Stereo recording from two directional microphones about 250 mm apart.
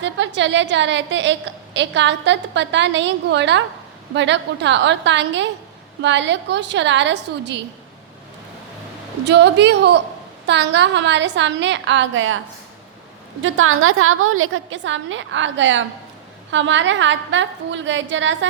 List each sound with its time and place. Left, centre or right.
0.0 s a woman's voice: right
9.2 s a woman's voice: right
13.4 s a woman's voice: right